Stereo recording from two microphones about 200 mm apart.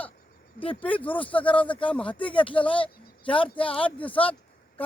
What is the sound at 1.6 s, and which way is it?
Speech, 25° left (ahead or behind).